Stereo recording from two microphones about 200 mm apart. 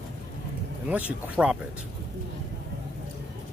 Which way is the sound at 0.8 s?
5° right (ahead or behind).